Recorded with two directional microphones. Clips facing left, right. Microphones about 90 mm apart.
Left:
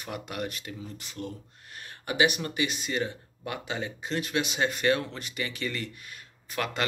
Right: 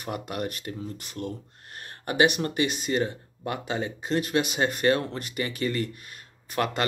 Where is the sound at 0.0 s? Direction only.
40° right (ahead or behind).